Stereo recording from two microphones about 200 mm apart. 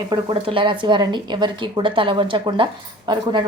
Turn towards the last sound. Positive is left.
turn(degrees=-25)  # may be behind; listen again after turning